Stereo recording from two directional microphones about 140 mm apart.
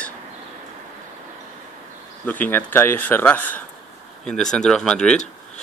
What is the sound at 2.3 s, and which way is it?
Speech, 10° left (ahead or behind).